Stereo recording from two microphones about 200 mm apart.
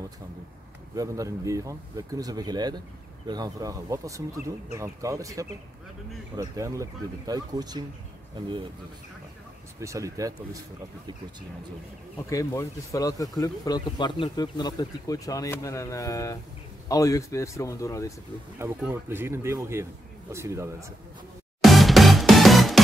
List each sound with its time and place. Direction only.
0.9 s speech: 15° right (ahead or behind)
9.8 s speech: 15° right (ahead or behind)
12.3 s speech: 15° left (ahead or behind)
18.8 s speech: 10° right (ahead or behind)
21.5 s music: centre (ahead or behind)